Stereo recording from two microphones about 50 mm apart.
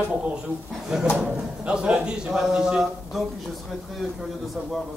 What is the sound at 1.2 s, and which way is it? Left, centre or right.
Speech, right.